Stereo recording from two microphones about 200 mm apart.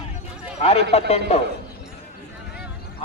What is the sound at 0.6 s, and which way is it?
Speech, 30° left (ahead or behind).